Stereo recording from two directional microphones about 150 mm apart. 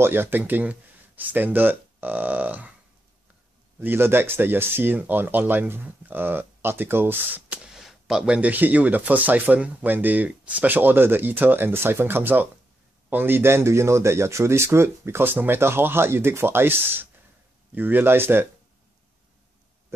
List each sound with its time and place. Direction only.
0.0 s speech: 15° right (ahead or behind)
3.8 s speech: 15° right (ahead or behind)